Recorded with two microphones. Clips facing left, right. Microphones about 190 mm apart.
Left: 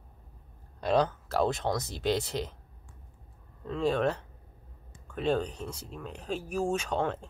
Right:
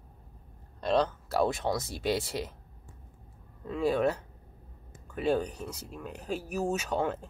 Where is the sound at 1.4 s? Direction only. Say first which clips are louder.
Even; 5° right (ahead or behind).